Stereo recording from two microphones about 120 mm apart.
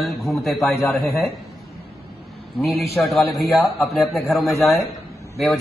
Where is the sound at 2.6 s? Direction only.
Centre (ahead or behind).